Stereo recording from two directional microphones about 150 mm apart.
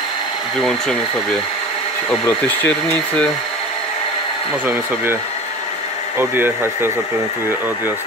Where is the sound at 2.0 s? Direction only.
10° left (ahead or behind).